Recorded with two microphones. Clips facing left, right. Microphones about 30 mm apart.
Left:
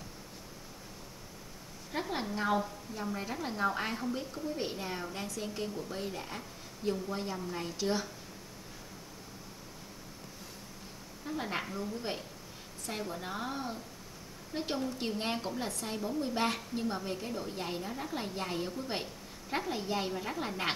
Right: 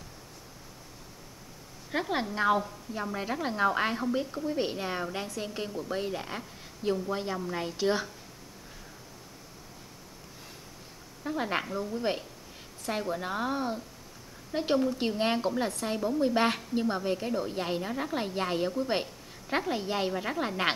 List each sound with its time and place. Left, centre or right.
1.9 s a woman's voice: right
11.2 s a woman's voice: centre